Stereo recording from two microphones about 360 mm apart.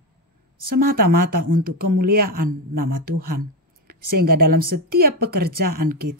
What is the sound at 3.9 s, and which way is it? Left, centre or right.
Speech, right.